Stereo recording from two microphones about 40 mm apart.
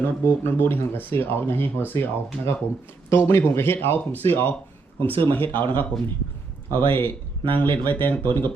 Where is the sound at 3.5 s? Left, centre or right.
Left.